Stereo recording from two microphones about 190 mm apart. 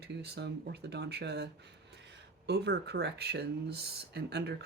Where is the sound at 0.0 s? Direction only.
60° right (ahead or behind).